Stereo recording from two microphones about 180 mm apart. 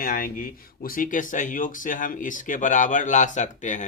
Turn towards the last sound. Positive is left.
turn(degrees=40)  # may be behind; listen again after turning